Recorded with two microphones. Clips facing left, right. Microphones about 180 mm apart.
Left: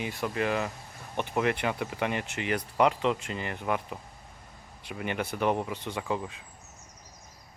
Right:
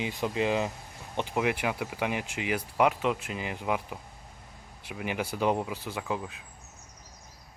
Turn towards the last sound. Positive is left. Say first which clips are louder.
# left 1 dB
turn(degrees=0)  # may be behind; listen again after turning